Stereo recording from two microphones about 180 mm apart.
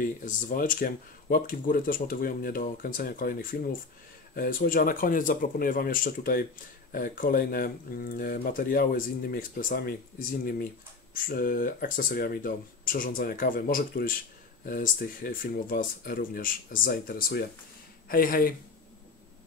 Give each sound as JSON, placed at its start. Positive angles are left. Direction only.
{"t": 0.0, "sound": "speech", "side_deg": 45}